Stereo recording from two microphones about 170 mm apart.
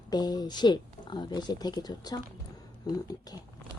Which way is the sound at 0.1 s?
25° left (ahead or behind).